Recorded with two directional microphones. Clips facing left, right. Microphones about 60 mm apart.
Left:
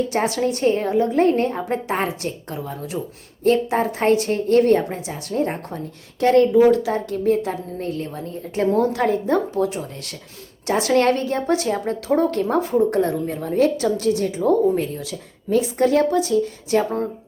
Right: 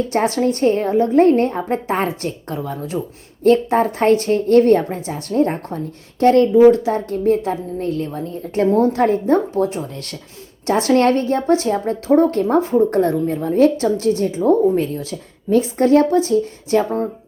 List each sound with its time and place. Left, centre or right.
0.1 s a woman's voice: right
6.5 s a woman's voice: right